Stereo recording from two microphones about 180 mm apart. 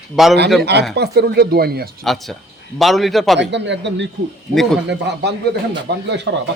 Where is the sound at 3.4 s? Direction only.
75° right (ahead or behind).